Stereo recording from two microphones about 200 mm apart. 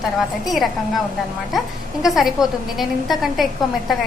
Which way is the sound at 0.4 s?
Centre (ahead or behind).